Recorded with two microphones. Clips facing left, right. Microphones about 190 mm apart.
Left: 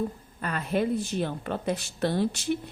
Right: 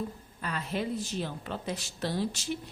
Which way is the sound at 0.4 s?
55° left (ahead or behind).